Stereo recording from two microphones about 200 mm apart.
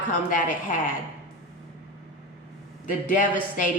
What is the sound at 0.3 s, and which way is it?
Speech, 40° left (ahead or behind).